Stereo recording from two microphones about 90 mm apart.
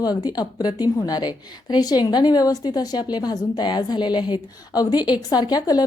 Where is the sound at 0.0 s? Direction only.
45° left (ahead or behind).